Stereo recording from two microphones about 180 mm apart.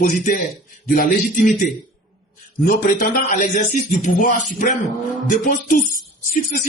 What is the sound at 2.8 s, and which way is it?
Speech, 45° left (ahead or behind).